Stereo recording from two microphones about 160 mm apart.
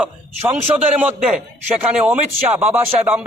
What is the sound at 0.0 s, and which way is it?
Speech, 10° right (ahead or behind).